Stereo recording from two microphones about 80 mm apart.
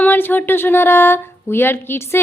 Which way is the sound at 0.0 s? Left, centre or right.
Left.